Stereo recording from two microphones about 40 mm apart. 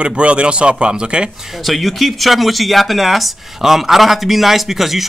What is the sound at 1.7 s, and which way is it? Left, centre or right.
Speech, centre.